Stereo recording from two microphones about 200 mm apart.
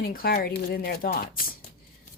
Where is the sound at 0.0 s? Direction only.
45° left (ahead or behind).